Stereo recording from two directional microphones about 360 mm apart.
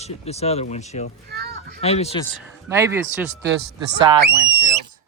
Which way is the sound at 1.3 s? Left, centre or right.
Right.